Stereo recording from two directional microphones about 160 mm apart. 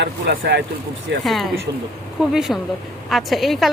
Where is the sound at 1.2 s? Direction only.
Centre (ahead or behind).